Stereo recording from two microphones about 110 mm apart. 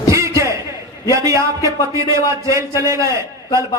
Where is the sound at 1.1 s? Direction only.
30° right (ahead or behind).